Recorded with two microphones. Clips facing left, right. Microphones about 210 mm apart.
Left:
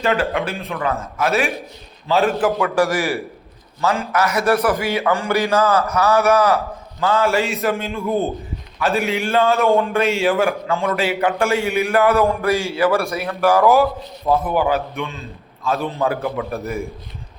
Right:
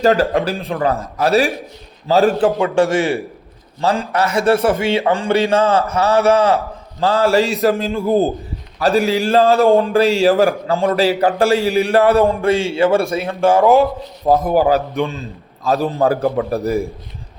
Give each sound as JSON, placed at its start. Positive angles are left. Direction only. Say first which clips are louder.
{"t": 0.0, "sound": "a man's voice", "louder": "right 5 dB", "side_deg": -35}
{"t": 14.3, "sound": "a man's voice", "louder": "right 4 dB", "side_deg": -40}